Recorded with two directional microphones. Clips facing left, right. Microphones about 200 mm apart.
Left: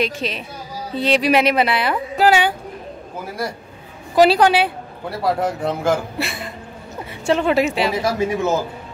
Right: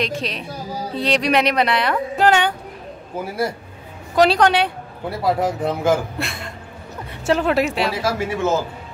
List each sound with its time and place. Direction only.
0.0 s speech: centre (ahead or behind)
4.1 s speech: 5° left (ahead or behind)
7.9 s speech: 20° left (ahead or behind)